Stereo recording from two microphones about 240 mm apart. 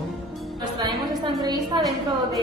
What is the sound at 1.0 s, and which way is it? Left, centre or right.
Speech, centre.